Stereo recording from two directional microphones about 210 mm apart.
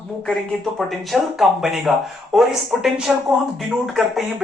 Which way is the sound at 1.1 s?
Centre (ahead or behind).